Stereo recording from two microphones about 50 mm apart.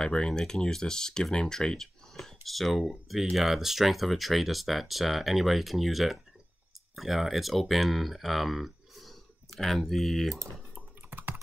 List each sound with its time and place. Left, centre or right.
0.0 s speech: centre
11.1 s computer keyboard: right